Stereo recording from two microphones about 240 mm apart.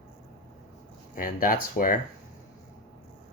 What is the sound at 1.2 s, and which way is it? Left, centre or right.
Speech, left.